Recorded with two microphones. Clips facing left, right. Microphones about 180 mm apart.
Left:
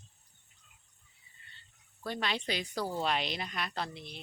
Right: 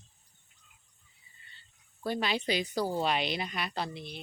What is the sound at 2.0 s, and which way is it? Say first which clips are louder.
Speech: right 4 dB; 5° right (ahead or behind).